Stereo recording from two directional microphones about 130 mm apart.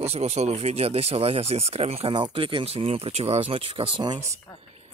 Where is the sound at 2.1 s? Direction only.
40° right (ahead or behind).